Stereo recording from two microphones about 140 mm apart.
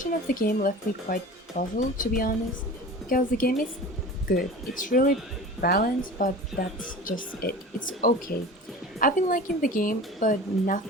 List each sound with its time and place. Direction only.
0.0 s a woman's voice: 90° left
5.5 s a woman's voice: 90° left
9.0 s a woman's voice: 75° left (ahead or behind)